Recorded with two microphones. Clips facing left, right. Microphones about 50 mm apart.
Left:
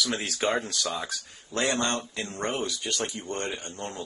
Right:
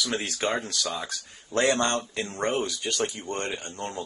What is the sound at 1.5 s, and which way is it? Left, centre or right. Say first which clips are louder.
Speech: right 3 dB; right.